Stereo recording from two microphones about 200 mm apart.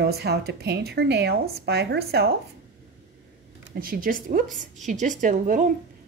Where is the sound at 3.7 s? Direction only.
45° right (ahead or behind).